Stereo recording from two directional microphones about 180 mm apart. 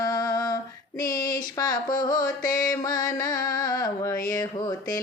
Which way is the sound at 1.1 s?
20° left (ahead or behind).